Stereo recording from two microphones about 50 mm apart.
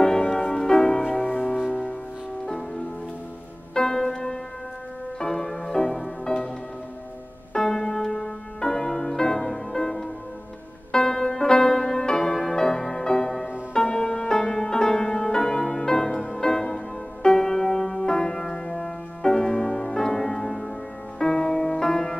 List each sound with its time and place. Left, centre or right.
0.4 s music: centre
1.2 s music: left
1.7 s music: centre
3.7 s music: centre
7.5 s music: centre